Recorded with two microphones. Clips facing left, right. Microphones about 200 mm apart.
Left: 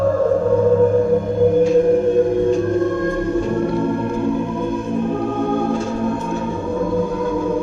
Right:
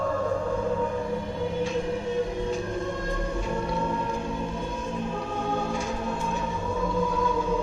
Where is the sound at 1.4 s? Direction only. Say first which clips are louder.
Left 15 dB; 50° left (ahead or behind).